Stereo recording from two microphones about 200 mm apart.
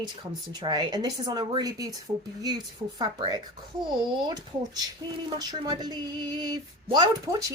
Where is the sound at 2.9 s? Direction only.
20° right (ahead or behind).